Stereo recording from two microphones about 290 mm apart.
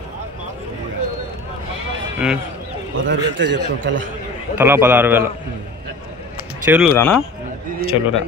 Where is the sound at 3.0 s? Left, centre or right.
Right.